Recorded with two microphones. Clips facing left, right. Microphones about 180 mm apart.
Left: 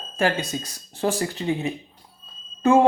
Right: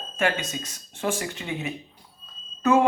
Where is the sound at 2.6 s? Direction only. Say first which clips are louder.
Left 3 dB; 30° left (ahead or behind).